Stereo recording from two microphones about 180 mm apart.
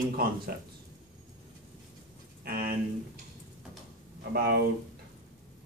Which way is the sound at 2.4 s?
55° right (ahead or behind).